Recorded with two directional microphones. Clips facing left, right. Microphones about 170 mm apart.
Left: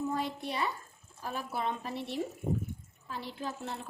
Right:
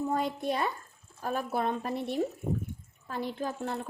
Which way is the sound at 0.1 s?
50° right (ahead or behind).